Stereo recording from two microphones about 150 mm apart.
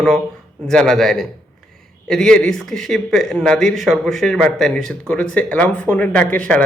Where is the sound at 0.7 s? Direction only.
5° left (ahead or behind).